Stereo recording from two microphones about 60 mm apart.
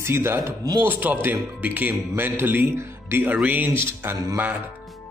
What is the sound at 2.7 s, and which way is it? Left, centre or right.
Music, right.